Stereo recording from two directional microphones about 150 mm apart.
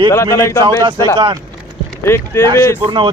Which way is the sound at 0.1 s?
20° left (ahead or behind).